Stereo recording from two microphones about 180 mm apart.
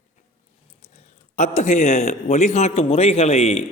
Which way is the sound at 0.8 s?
35° left (ahead or behind).